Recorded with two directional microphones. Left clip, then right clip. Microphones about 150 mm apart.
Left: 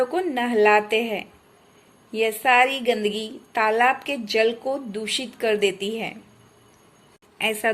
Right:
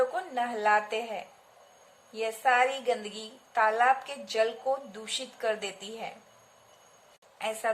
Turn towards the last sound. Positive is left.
turn(degrees=35)  # may be behind; listen again after turning